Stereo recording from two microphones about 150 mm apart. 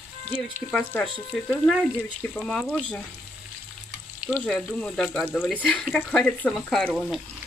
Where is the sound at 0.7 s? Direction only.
5° left (ahead or behind).